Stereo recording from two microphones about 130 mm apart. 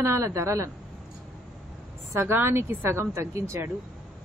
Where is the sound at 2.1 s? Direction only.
15° right (ahead or behind).